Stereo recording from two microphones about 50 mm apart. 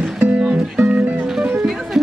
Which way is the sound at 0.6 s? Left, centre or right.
Centre.